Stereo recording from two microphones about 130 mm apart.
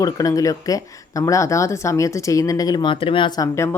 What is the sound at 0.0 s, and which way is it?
Speech, 25° left (ahead or behind).